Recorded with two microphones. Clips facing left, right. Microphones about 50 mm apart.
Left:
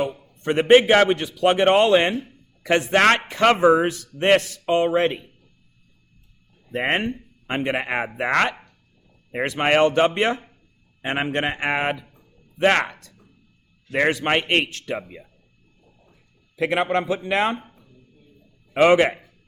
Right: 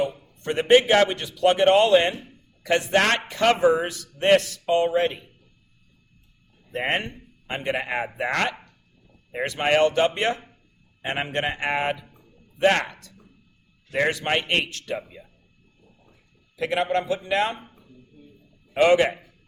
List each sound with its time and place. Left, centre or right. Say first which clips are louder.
0.0 s a man's voice: left 1 dB; left
6.7 s a man's voice: left 3 dB; centre
13.9 s a man's voice: left 3 dB; left
16.6 s a man's voice: left 2 dB; left
18.8 s a man's voice: left 2 dB; left